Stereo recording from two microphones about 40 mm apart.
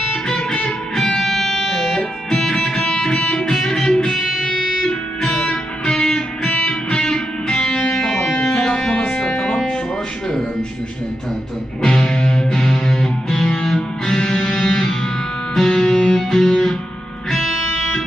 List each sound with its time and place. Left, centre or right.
0.3 s music: left
0.9 s music: centre
2.5 s music: centre
4.1 s music: centre
4.9 s music: left
11.8 s music: centre